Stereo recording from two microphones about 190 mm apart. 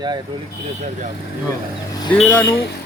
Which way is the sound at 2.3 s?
10° left (ahead or behind).